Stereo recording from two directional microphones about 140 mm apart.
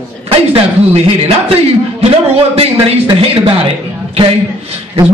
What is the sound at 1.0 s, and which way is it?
A man's voice, 45° right (ahead or behind).